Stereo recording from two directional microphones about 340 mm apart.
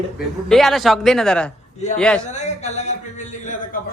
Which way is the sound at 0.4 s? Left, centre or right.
Centre.